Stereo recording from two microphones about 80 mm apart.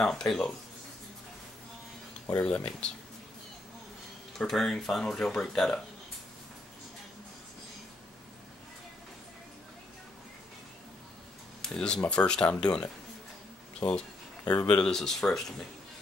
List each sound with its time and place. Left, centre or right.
0.0 s speech: centre
2.3 s speech: centre
4.4 s speech: centre
11.6 s speech: centre
13.7 s a sound: centre
14.7 s speech: centre